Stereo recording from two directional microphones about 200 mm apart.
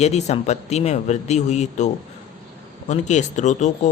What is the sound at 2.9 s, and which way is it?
Speech, 35° left (ahead or behind).